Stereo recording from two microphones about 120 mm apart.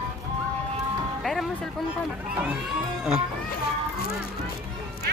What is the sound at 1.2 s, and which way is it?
Music, centre (ahead or behind).